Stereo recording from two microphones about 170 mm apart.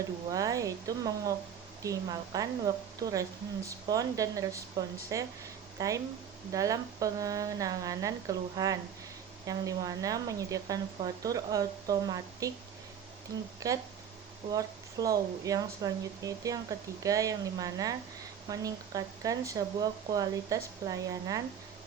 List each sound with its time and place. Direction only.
0.3 s speech: 20° right (ahead or behind)
13.6 s speech: 20° right (ahead or behind)